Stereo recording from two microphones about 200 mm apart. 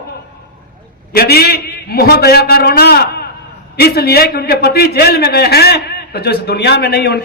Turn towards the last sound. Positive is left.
turn(degrees=55)  # may be behind; listen again after turning